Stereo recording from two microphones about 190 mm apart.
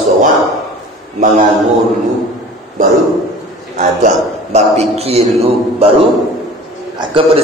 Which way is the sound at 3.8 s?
40° right (ahead or behind).